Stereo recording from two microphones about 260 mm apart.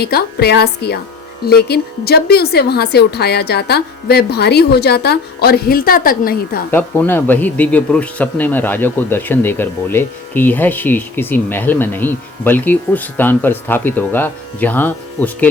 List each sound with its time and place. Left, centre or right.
0.0 s a woman's voice: left
6.7 s speech: centre